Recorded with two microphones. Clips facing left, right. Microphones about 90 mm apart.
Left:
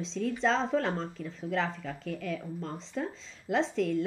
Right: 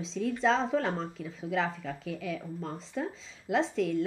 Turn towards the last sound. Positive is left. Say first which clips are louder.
# even
turn(degrees=0)  # may be behind; listen again after turning